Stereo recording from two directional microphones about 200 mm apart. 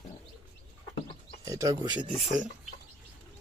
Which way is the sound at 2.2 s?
40° right (ahead or behind).